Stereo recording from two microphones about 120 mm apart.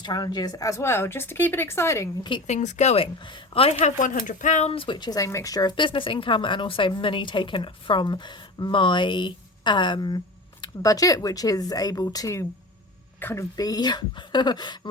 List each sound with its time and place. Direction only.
0.0 s speech: 35° left (ahead or behind)
2.5 s speech: 80° left
3.2 s speech: 40° left (ahead or behind); by 4.7 s 85° left
4.7 s speech: 45° left (ahead or behind); by 12.5 s 25° left (ahead or behind)
13.1 s speech: 15° left (ahead or behind)
13.6 s speech: 30° left (ahead or behind)